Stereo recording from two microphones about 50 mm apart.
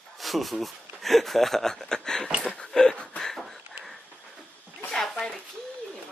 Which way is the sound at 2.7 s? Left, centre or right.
Centre.